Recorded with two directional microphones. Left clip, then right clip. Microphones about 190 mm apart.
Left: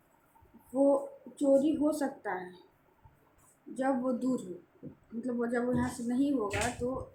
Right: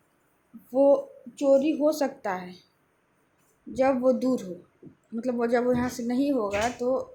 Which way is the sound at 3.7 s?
35° right (ahead or behind).